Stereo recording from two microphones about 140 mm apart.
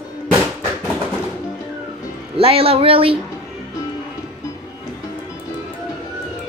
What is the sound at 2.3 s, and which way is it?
Speech, 40° right (ahead or behind).